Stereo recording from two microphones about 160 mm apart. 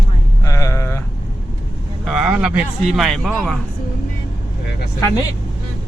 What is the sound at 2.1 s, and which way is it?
Speech, centre (ahead or behind).